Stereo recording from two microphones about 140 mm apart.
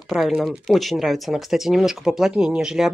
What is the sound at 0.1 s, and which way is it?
Speech, 5° right (ahead or behind).